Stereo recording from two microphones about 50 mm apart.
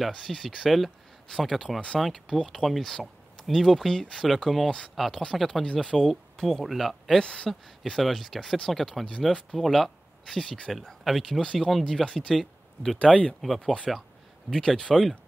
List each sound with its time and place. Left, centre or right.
0.2 s speech: centre
4.6 s speech: centre
4.9 s speech: centre
7.2 s speech: centre
13.0 s speech: left
13.4 s speech: centre